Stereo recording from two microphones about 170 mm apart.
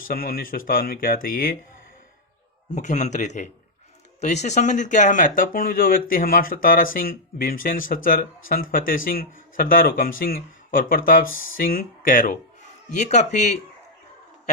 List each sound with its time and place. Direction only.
0.0 s speech: 55° left (ahead or behind)
2.7 s a man's voice: 45° left (ahead or behind)